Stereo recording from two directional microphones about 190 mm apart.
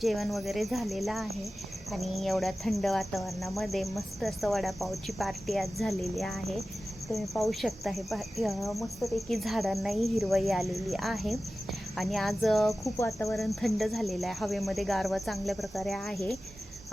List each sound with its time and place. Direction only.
0.0 s cricket: centre (ahead or behind)
12.8 s cricket: 15° left (ahead or behind)
13.3 s cricket: centre (ahead or behind)